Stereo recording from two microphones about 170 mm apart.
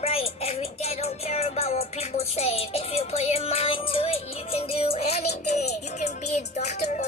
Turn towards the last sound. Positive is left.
turn(degrees=40)  # may be behind; listen again after turning